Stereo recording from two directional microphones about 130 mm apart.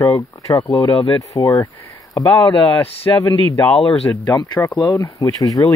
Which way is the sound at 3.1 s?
20° left (ahead or behind).